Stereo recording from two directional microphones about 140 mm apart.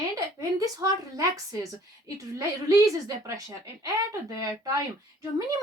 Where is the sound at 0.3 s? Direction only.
25° right (ahead or behind).